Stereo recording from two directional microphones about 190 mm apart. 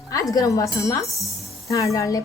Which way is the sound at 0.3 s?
15° left (ahead or behind).